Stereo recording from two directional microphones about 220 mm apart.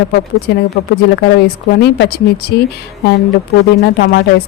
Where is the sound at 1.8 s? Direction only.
45° left (ahead or behind).